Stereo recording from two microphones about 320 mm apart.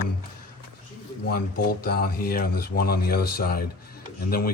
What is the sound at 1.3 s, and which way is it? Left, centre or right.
Speech, left.